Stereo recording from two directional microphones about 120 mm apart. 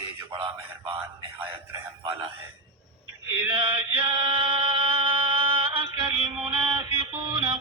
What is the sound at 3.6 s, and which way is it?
Chant, 45° right (ahead or behind).